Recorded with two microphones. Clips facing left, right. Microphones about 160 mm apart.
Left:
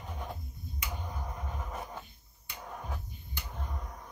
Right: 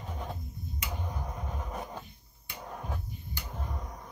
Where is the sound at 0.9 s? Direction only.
5° right (ahead or behind).